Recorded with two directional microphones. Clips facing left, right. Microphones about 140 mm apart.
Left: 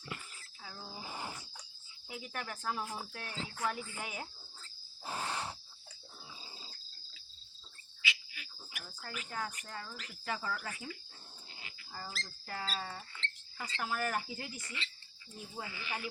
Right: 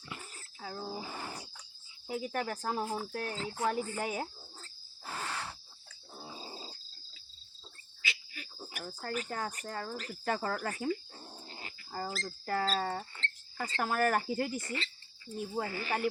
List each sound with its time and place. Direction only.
0.2 s a sound: 45° right (ahead or behind)
2.0 s cricket: 40° right (ahead or behind)
5.0 s cricket: 20° left (ahead or behind)
6.2 s grunt: 40° right (ahead or behind)
8.0 s speech: 40° right (ahead or behind)
11.5 s dog: 45° right (ahead or behind)
12.1 s speech: 45° right (ahead or behind)